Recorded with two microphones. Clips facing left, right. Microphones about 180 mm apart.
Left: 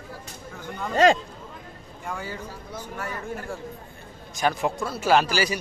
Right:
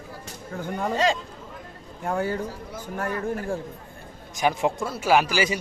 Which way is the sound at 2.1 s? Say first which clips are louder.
Right 8 dB; 55° right (ahead or behind).